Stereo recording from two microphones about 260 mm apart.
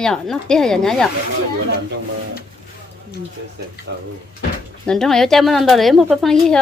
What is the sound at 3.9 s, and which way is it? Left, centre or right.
Speech, right.